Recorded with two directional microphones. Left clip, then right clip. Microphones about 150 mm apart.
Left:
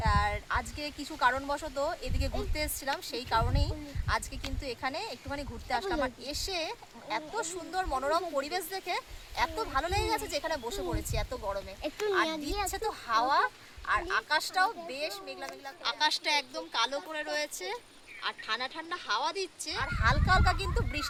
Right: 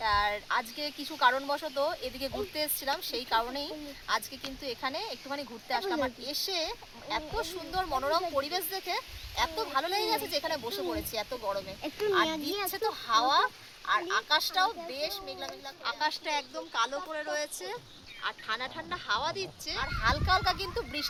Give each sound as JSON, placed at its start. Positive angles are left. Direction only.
{"t": 0.0, "sound": "speech", "side_deg": 10}
{"t": 12.3, "sound": "speech", "side_deg": -35}
{"t": 12.7, "sound": "speech", "side_deg": 10}
{"t": 18.2, "sound": "speech", "side_deg": 40}
{"t": 19.8, "sound": "speech", "side_deg": 5}